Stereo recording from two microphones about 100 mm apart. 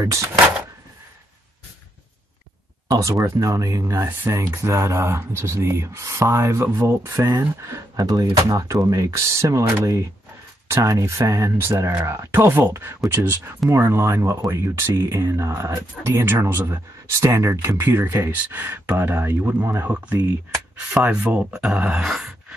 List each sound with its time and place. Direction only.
0.0 s speech: 30° right (ahead or behind)
2.9 s speech: 35° right (ahead or behind)
10.7 s speech: 30° right (ahead or behind); by 22.6 s 5° right (ahead or behind)